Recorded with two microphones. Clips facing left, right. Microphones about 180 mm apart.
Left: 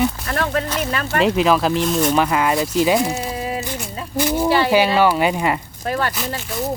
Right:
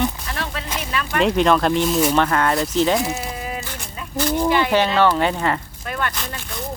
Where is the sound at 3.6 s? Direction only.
10° left (ahead or behind).